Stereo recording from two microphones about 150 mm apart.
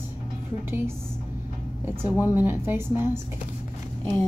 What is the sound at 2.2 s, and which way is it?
A woman's voice, 15° right (ahead or behind).